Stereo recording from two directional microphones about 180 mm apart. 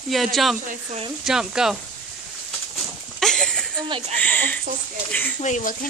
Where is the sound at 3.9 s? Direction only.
35° right (ahead or behind).